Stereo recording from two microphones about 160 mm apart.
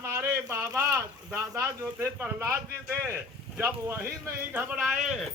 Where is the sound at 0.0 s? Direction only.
15° right (ahead or behind).